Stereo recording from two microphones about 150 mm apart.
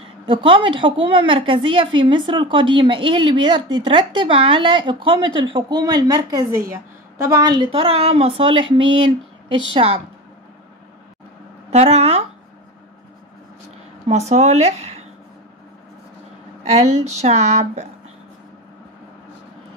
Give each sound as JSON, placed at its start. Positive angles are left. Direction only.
{"t": 0.0, "sound": "a woman's voice", "side_deg": -35}
{"t": 7.7, "sound": "a woman's voice", "side_deg": -40}
{"t": 11.7, "sound": "speech", "side_deg": -45}
{"t": 14.0, "sound": "speech", "side_deg": -45}
{"t": 16.6, "sound": "speech", "side_deg": -50}